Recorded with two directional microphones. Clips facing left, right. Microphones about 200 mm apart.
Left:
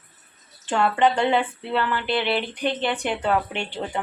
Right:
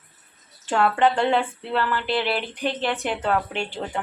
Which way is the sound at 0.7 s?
Centre (ahead or behind).